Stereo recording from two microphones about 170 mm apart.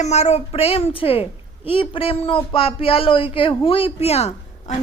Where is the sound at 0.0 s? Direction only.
40° left (ahead or behind).